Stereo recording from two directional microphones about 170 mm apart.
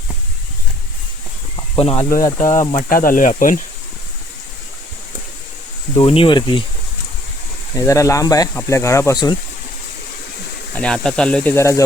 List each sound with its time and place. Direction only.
1.5 s a sound: 30° left (ahead or behind)
2.2 s speech: 20° left (ahead or behind)
2.7 s speech: 55° left (ahead or behind)
5.9 s speech: 30° left (ahead or behind)
7.8 s speech: 20° left (ahead or behind)
10.8 s speech: 5° left (ahead or behind)